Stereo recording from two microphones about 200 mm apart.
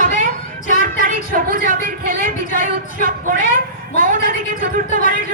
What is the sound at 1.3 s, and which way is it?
Speech, 45° right (ahead or behind).